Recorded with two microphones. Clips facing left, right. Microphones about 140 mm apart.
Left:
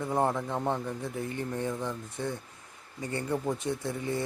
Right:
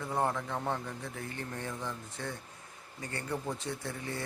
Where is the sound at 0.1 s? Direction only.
20° left (ahead or behind).